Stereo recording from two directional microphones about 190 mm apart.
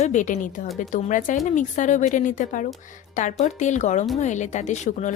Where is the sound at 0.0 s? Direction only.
40° left (ahead or behind).